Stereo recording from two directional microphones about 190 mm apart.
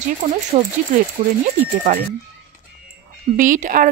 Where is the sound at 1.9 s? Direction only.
40° right (ahead or behind).